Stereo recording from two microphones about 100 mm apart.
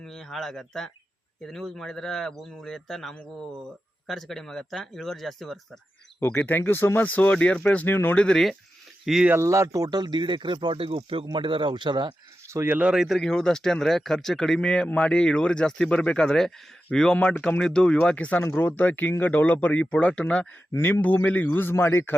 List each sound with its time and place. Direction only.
0.0 s speech: 5° left (ahead or behind)
6.1 s speech: 20° left (ahead or behind)
8.2 s speech: 5° left (ahead or behind)
9.0 s speech: 5° right (ahead or behind)
9.3 s speech: 30° right (ahead or behind); by 12.1 s 50° right (ahead or behind)
12.5 s speech: 30° right (ahead or behind)
12.7 s speech: 10° right (ahead or behind); by 22.1 s 25° left (ahead or behind)